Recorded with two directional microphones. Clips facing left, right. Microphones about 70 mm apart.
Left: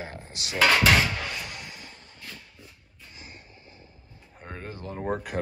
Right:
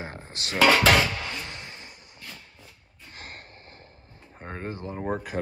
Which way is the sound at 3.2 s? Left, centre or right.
Right.